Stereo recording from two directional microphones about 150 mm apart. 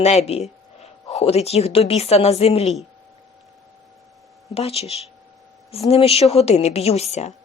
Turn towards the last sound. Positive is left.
turn(degrees=45)  # may be behind; listen again after turning